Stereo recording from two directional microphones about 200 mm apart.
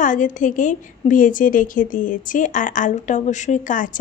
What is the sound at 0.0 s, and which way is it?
A woman's voice, 40° left (ahead or behind).